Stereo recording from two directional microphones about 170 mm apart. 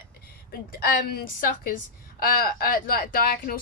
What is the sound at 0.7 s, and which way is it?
A woman's voice, 55° left (ahead or behind).